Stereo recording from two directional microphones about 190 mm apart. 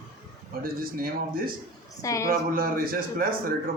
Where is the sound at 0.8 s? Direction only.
50° right (ahead or behind).